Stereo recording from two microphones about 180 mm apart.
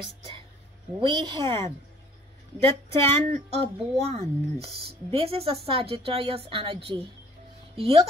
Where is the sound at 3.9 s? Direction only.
35° right (ahead or behind).